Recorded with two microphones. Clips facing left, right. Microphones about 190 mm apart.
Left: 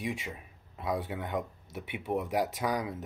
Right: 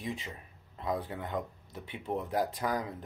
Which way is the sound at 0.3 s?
10° left (ahead or behind).